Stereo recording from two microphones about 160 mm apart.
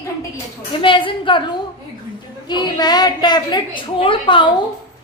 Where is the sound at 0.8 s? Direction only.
30° left (ahead or behind).